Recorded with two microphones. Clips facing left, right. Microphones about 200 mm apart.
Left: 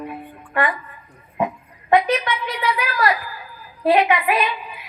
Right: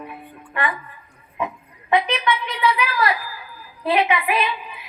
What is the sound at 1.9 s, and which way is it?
A woman's voice, 40° left (ahead or behind).